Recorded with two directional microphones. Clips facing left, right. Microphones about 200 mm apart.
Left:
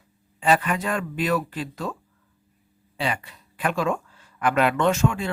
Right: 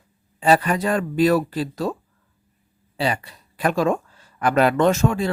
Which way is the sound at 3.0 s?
35° right (ahead or behind).